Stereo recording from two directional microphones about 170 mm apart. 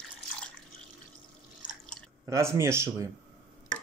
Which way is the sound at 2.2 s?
15° right (ahead or behind).